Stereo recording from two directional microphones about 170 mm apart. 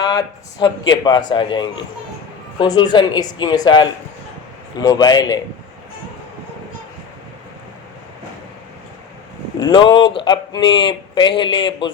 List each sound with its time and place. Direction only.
0.0 s speech: 25° left (ahead or behind)
9.6 s speech: 25° left (ahead or behind)